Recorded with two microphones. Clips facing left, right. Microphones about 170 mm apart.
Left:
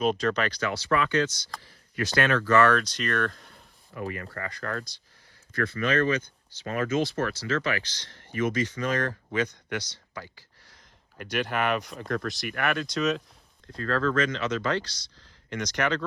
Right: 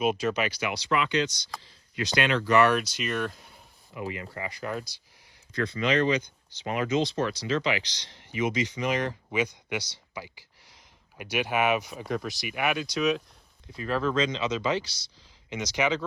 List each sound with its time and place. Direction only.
0.0 s speech: 5° right (ahead or behind)
3.9 s speech: 15° right (ahead or behind)